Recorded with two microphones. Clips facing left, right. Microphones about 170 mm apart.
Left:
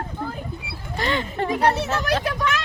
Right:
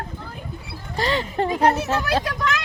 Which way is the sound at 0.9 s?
35° right (ahead or behind).